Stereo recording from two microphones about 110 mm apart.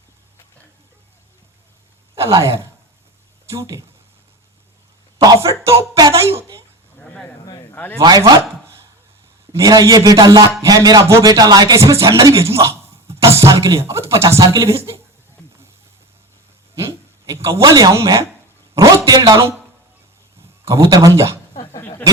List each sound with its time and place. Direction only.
2.1 s a man's voice: 25° right (ahead or behind)
5.5 s a sound: 25° right (ahead or behind)
7.7 s speech: 20° left (ahead or behind)
8.0 s a man's voice: 35° right (ahead or behind)
9.5 s a man's voice: 30° right (ahead or behind)
16.7 s a man's voice: 25° right (ahead or behind)
20.7 s a man's voice: 30° right (ahead or behind)
21.8 s a sound: 20° left (ahead or behind)